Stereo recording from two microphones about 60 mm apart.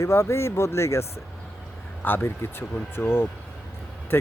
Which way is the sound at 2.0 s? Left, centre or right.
Left.